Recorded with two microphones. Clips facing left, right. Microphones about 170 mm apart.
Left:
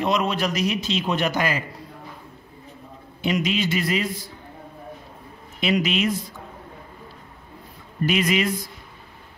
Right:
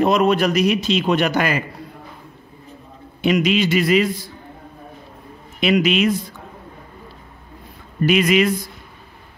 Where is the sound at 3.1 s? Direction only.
75° right (ahead or behind).